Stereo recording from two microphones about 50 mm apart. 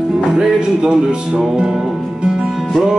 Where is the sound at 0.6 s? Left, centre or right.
Centre.